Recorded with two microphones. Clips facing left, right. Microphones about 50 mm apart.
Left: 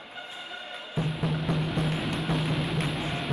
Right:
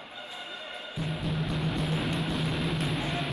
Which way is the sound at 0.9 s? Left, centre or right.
Centre.